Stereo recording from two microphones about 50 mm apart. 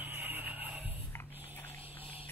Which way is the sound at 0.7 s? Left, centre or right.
Right.